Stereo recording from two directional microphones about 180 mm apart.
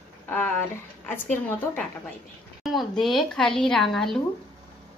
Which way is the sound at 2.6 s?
Centre (ahead or behind).